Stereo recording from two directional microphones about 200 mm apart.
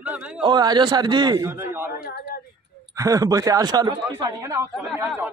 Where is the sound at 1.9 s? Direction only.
50° left (ahead or behind).